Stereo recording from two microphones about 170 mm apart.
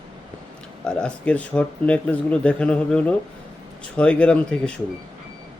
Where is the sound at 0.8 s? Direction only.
5° left (ahead or behind).